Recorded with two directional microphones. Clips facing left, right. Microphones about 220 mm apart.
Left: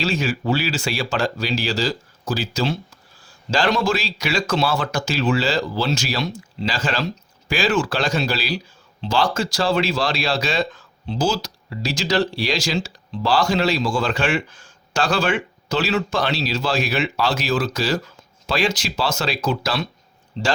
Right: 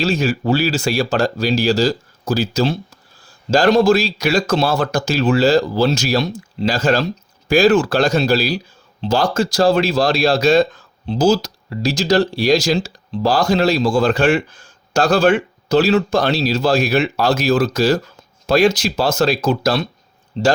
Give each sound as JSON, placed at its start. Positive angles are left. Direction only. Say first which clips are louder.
{"t": 0.0, "sound": "speech", "louder": "right 5 dB", "side_deg": -40}